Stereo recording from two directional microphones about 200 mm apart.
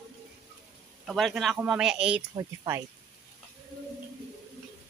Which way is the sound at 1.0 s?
Centre (ahead or behind).